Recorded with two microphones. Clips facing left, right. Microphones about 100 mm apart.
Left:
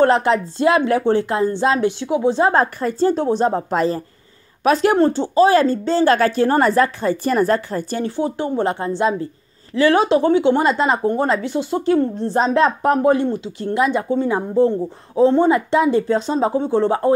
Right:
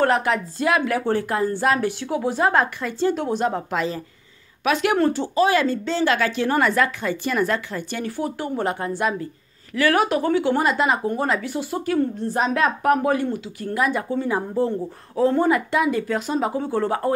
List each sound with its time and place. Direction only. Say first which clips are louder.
0.0 s speech: left 5 dB; 30° left (ahead or behind)
8.2 s speech: left 5 dB; 25° left (ahead or behind)